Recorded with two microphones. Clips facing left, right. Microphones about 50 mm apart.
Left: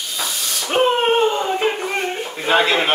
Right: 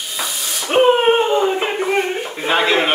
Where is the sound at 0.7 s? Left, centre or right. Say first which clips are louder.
Right 4 dB; centre.